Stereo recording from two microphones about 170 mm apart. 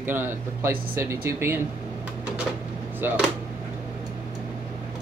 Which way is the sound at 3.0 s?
10° right (ahead or behind).